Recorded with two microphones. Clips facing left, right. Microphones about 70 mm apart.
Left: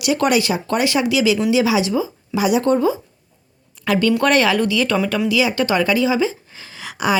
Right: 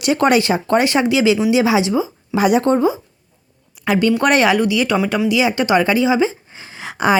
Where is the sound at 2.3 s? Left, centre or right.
Right.